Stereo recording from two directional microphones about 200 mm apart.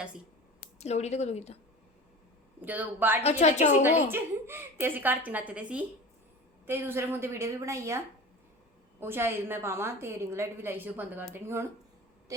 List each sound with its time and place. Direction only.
0.6 s speech: 35° left (ahead or behind)
2.6 s a woman's voice: 10° right (ahead or behind)
3.2 s a woman's voice: 35° left (ahead or behind)
4.1 s a woman's voice: 10° right (ahead or behind)